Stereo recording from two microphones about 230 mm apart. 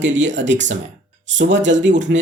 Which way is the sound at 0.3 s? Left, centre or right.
Right.